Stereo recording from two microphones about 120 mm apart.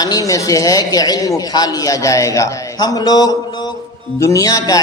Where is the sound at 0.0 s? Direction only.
30° left (ahead or behind).